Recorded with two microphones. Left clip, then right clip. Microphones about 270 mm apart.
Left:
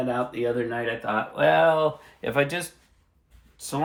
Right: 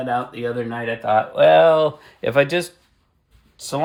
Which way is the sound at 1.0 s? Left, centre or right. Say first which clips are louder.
Right 9 dB; right.